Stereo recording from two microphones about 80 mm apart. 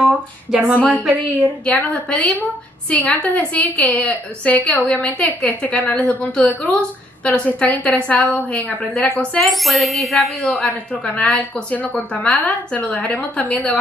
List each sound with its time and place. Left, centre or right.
0.0 s a sound: centre
0.7 s a woman's voice: centre
9.4 s speech: centre
10.6 s a woman's voice: centre